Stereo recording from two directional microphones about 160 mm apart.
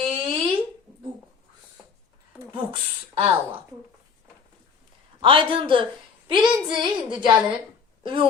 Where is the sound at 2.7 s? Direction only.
35° right (ahead or behind).